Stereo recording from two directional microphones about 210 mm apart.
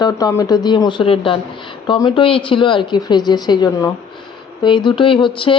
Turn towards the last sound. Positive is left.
turn(degrees=25)  # may be behind; listen again after turning